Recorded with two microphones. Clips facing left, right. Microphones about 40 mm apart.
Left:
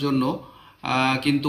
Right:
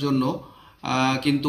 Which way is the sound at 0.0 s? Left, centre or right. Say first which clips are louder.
Even; centre.